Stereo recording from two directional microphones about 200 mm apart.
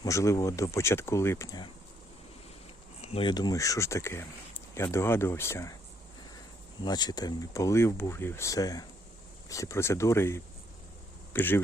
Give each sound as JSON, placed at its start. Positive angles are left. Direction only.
{"t": 0.0, "sound": "speech", "side_deg": 15}
{"t": 3.0, "sound": "speech", "side_deg": 30}
{"t": 6.8, "sound": "speech", "side_deg": 20}